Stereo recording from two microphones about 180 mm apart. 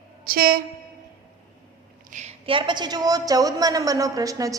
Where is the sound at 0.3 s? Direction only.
55° right (ahead or behind).